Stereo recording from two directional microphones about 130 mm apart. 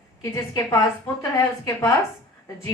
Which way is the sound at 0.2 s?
25° left (ahead or behind).